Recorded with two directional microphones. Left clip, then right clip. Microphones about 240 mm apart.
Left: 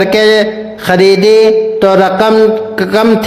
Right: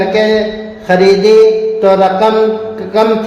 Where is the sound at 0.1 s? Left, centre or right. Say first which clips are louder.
Left 3 dB; left.